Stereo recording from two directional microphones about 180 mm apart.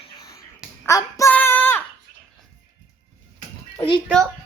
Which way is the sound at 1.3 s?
10° left (ahead or behind).